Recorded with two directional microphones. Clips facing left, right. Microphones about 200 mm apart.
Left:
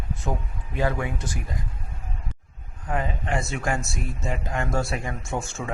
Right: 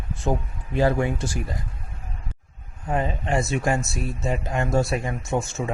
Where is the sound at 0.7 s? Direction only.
30° right (ahead or behind).